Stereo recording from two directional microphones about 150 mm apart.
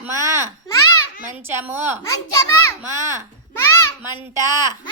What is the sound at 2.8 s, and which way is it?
Speech, 20° right (ahead or behind).